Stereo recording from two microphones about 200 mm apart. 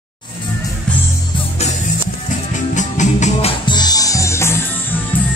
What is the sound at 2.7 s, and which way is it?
Music, 35° left (ahead or behind).